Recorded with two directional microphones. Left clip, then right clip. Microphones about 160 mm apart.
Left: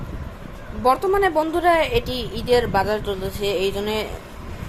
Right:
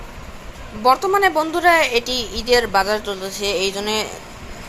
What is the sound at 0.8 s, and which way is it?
A woman's voice, 15° left (ahead or behind).